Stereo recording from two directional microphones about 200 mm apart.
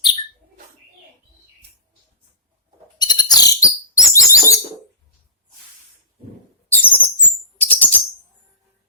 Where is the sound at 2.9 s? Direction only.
20° left (ahead or behind).